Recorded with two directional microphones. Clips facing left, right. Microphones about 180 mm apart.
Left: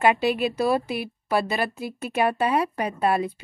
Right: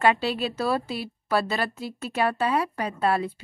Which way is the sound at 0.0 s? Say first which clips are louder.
Left 2 dB; 15° left (ahead or behind).